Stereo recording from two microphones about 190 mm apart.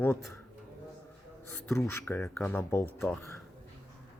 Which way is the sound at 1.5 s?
15° left (ahead or behind).